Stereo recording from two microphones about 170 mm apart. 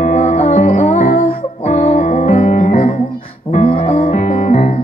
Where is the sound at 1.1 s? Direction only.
45° left (ahead or behind).